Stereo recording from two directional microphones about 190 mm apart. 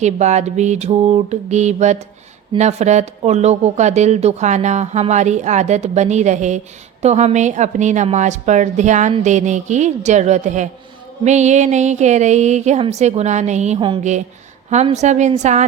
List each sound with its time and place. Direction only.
0.0 s speech: 35° right (ahead or behind)
14.0 s speech: 40° right (ahead or behind)